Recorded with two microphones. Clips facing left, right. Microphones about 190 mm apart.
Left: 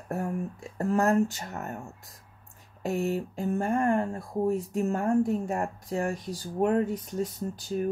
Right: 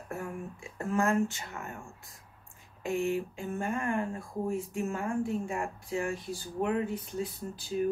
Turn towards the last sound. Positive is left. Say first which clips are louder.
# left 1 dB
turn(degrees=45)  # may be behind; listen again after turning